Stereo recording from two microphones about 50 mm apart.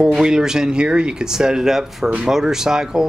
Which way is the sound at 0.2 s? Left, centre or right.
Centre.